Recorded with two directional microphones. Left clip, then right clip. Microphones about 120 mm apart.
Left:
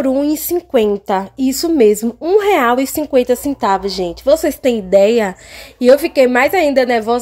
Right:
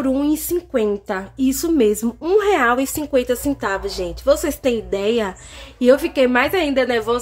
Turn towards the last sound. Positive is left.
turn(degrees=40)  # may be behind; listen again after turning